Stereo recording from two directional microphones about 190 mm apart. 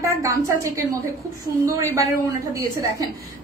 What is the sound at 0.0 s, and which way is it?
A woman's voice, 15° right (ahead or behind).